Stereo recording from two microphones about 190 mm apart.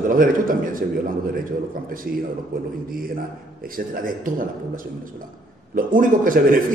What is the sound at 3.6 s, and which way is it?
Speech, 45° right (ahead or behind).